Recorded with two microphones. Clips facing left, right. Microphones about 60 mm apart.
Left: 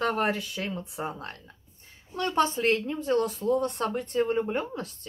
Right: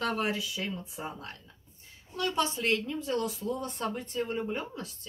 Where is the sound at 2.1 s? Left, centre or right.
Left.